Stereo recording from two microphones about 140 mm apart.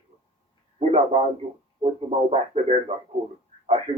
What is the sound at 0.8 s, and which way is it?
Speech, 50° right (ahead or behind).